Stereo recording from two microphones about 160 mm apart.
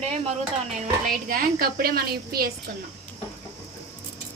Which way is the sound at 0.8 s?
60° right (ahead or behind).